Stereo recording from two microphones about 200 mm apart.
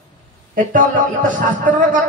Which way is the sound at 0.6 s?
40° right (ahead or behind).